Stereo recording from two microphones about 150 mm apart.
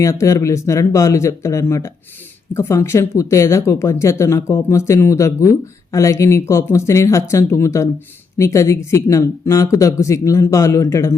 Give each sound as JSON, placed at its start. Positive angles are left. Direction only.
{"t": 0.0, "sound": "speech", "side_deg": 20}